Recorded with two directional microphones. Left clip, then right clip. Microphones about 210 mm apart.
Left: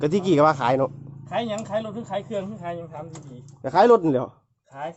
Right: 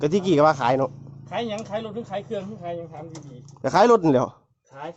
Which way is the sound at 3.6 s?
25° right (ahead or behind).